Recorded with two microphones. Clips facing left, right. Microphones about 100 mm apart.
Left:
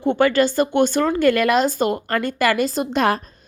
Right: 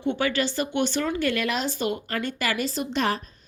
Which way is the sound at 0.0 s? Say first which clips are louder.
Left 8 dB; 50° left (ahead or behind).